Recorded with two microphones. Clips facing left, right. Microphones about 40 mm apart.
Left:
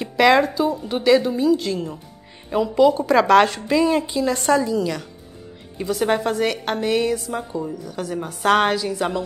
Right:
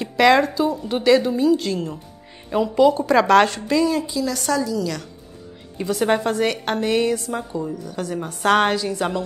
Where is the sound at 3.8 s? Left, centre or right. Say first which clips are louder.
Left 2 dB; left.